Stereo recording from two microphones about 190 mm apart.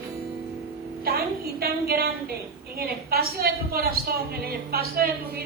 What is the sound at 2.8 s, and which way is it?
A woman's voice, 55° right (ahead or behind).